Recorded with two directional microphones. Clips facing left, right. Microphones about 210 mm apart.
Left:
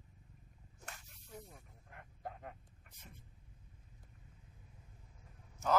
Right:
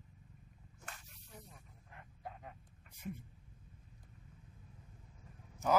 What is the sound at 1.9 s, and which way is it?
Dog, 50° left (ahead or behind).